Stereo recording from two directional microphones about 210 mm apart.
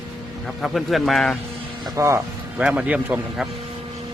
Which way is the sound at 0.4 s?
Centre (ahead or behind).